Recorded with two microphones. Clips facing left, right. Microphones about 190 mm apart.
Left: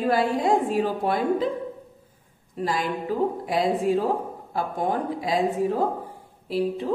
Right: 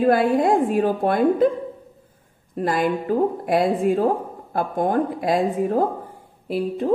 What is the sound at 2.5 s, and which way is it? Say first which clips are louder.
A woman's voice: right 5 dB; 55° right (ahead or behind).